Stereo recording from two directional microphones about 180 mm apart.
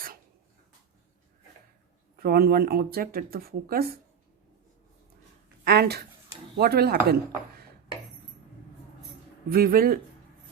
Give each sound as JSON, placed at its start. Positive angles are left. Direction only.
{"t": 2.1, "sound": "speech", "side_deg": -55}
{"t": 5.6, "sound": "a sound", "side_deg": -60}
{"t": 6.6, "sound": "speech", "side_deg": -60}
{"t": 9.5, "sound": "speech", "side_deg": -55}